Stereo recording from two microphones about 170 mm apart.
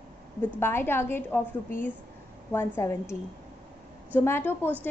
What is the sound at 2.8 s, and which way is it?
Speech, 15° left (ahead or behind).